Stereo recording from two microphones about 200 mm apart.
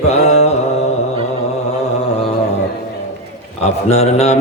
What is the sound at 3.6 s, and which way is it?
Speech, 35° left (ahead or behind).